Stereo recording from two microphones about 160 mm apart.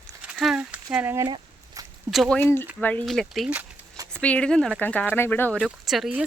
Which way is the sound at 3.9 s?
20° right (ahead or behind).